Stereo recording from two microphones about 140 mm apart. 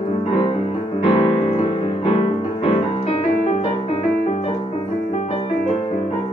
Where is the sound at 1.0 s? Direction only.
45° left (ahead or behind).